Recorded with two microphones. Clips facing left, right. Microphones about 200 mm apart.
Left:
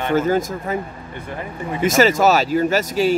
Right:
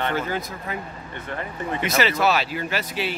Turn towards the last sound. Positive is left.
turn(degrees=45)  # may be behind; listen again after turning